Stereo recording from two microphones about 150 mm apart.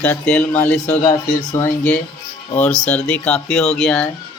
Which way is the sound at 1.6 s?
10° left (ahead or behind).